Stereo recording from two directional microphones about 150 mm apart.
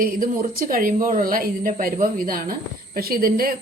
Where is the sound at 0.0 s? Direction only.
70° right (ahead or behind).